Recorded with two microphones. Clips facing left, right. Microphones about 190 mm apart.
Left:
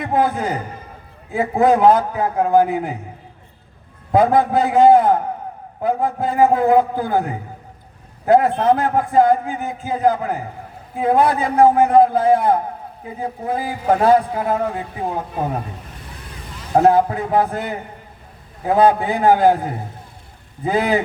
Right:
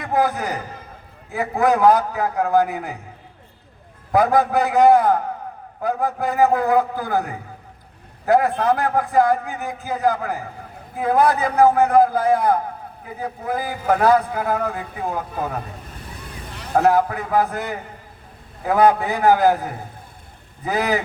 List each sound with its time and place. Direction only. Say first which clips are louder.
0.0 s a man's voice: left 2 dB; 25° left (ahead or behind)
4.1 s a man's voice: left 2 dB; 25° left (ahead or behind)
16.7 s a man's voice: left 3 dB; 25° left (ahead or behind)